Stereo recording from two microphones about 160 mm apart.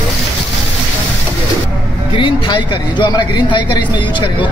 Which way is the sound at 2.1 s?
30° left (ahead or behind).